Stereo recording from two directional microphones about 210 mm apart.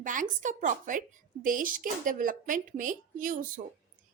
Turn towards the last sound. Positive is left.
turn(degrees=-40)  # may be behind; listen again after turning